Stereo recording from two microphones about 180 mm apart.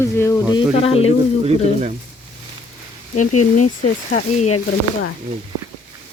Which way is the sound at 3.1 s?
40° left (ahead or behind).